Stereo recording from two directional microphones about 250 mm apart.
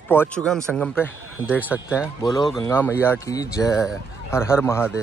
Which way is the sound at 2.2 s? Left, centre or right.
Centre.